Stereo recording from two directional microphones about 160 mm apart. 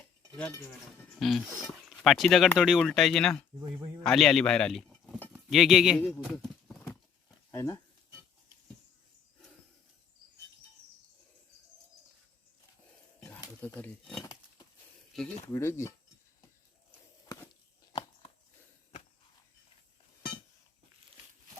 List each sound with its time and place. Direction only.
0.3 s speech: 10° left (ahead or behind)
7.5 s speech: 15° left (ahead or behind)
13.1 s a sound: 5° left (ahead or behind)
15.1 s speech: centre (ahead or behind)
15.5 s speech: 15° left (ahead or behind)